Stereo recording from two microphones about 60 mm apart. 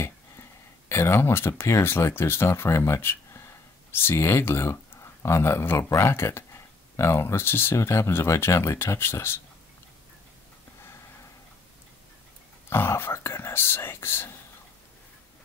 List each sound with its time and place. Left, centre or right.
0.0 s speech: left
7.7 s speech: left
12.6 s speech: left